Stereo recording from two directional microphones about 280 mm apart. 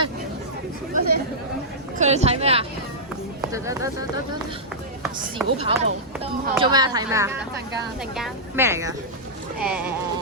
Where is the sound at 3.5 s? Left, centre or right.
Centre.